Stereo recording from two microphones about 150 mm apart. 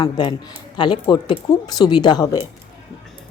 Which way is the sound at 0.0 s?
30° left (ahead or behind).